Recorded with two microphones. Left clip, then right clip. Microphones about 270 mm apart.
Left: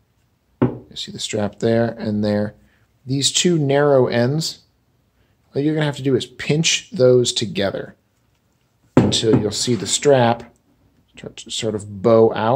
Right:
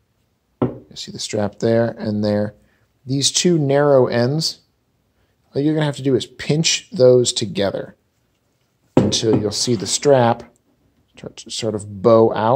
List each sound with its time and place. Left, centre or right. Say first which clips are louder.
0.8 s speech: left 1 dB; centre
9.1 s speech: even; centre